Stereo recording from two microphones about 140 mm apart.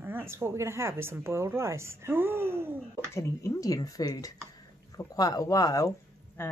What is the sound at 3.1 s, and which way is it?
Speech, 20° left (ahead or behind).